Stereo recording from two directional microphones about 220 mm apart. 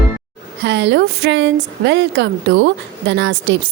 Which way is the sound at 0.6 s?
50° right (ahead or behind).